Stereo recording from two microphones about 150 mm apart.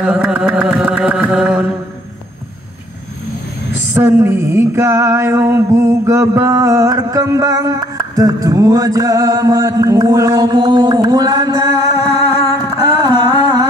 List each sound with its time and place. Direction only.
0.0 s carnatic music: 5° right (ahead or behind)
3.9 s mantra: 15° right (ahead or behind)
13.0 s a sound: 30° right (ahead or behind)